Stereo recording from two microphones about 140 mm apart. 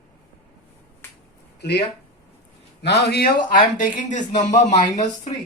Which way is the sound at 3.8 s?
65° left (ahead or behind).